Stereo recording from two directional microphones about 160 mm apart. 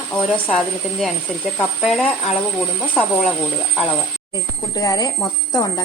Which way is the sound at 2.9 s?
10° left (ahead or behind).